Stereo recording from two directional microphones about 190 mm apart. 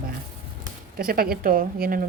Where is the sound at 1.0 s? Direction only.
50° right (ahead or behind).